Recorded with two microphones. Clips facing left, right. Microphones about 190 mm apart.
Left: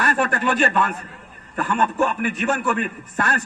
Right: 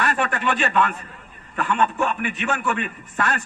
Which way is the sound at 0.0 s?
45° left (ahead or behind).